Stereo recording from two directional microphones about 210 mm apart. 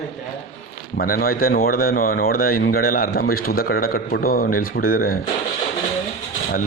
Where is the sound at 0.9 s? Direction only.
45° left (ahead or behind).